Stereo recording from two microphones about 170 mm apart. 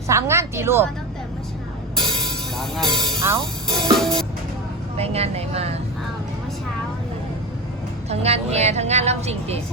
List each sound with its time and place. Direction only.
0.1 s a woman's voice: 15° right (ahead or behind)
2.0 s music: centre (ahead or behind)
3.2 s speech: 25° right (ahead or behind)
4.0 s music: centre (ahead or behind)
4.9 s a woman's voice: 35° right (ahead or behind)
8.1 s a woman's voice: 40° right (ahead or behind)